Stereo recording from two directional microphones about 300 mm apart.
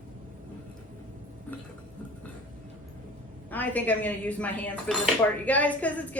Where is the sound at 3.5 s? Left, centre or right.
Centre.